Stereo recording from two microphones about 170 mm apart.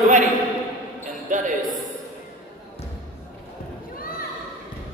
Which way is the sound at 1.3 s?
50° right (ahead or behind).